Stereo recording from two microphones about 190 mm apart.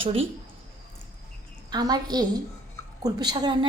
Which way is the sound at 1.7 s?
20° right (ahead or behind).